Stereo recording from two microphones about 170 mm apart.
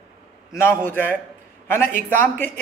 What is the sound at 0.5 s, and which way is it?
A man's voice, 15° left (ahead or behind).